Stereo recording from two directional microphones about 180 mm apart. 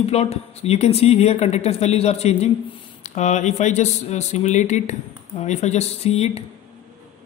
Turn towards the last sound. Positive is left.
turn(degrees=35)  # may be behind; listen again after turning